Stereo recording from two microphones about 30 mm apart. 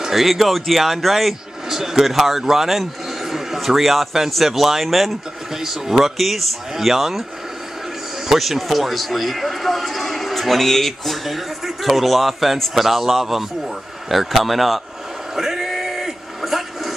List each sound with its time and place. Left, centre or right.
0.1 s speech: centre
1.7 s a man's voice: centre
5.6 s speech: centre
8.3 s a man's voice: centre
15.3 s male singing: centre
16.3 s a sound: centre